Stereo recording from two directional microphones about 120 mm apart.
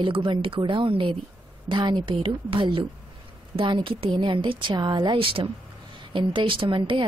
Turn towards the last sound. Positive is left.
turn(degrees=-45)  # may be behind; listen again after turning